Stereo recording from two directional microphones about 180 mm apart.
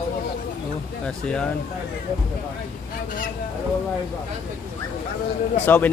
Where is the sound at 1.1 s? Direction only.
5° left (ahead or behind).